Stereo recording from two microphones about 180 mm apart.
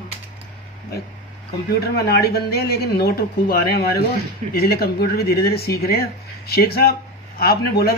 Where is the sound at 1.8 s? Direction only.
60° left (ahead or behind).